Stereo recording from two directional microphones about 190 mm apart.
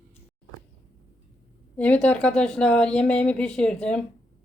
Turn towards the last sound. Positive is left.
turn(degrees=5)  # may be behind; listen again after turning